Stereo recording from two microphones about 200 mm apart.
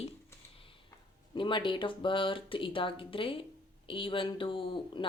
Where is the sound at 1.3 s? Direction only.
25° left (ahead or behind).